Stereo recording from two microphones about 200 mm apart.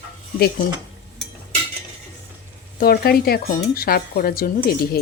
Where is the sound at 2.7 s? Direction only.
50° left (ahead or behind).